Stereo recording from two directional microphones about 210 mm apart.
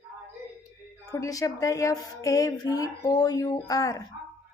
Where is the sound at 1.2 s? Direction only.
15° left (ahead or behind).